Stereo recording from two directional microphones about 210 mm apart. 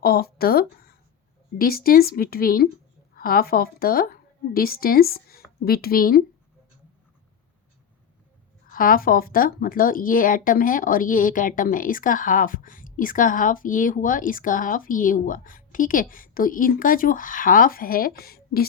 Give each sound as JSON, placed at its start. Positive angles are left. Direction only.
{"t": 0.0, "sound": "a woman's voice", "side_deg": 45}
{"t": 8.7, "sound": "speech", "side_deg": 40}